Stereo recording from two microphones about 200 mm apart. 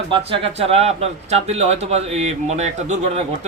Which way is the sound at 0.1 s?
30° right (ahead or behind).